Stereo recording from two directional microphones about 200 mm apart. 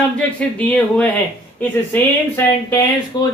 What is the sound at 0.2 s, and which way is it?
Speech, 5° left (ahead or behind).